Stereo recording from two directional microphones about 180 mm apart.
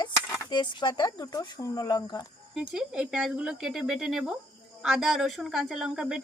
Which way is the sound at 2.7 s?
5° right (ahead or behind).